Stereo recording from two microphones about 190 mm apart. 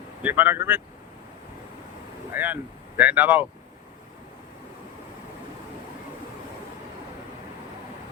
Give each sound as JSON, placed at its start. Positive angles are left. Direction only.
{"t": 0.2, "sound": "speech", "side_deg": -10}
{"t": 2.3, "sound": "speech", "side_deg": -10}